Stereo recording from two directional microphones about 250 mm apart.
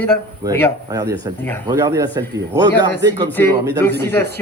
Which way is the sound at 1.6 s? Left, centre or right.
Centre.